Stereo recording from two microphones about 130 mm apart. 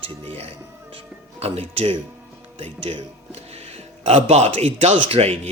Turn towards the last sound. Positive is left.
turn(degrees=-50)  # may be behind; listen again after turning